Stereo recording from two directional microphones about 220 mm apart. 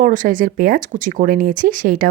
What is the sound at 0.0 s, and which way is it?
Speech, 35° right (ahead or behind).